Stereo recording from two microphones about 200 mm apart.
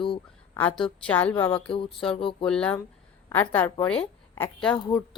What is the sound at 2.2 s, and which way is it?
Speech, 25° left (ahead or behind).